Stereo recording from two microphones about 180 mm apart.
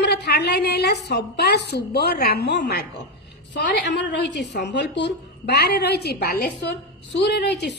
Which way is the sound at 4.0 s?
75° left (ahead or behind).